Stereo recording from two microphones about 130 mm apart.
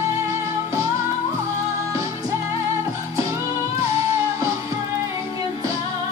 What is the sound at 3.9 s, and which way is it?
Music, 25° right (ahead or behind).